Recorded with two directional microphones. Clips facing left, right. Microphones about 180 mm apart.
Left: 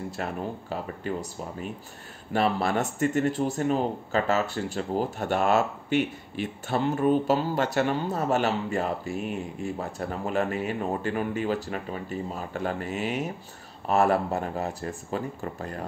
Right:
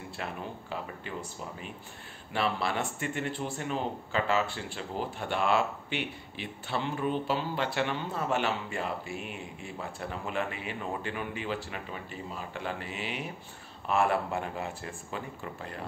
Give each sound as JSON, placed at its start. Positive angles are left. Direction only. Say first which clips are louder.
{"t": 0.2, "sound": "speech", "louder": "left 5 dB", "side_deg": 40}
{"t": 2.3, "sound": "speech", "louder": "left 6 dB", "side_deg": 45}